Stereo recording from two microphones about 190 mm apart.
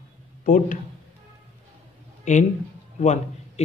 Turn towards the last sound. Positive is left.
turn(degrees=40)  # may be behind; listen again after turning